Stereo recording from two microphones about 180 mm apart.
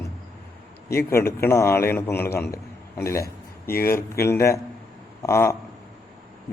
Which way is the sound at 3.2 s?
55° left (ahead or behind).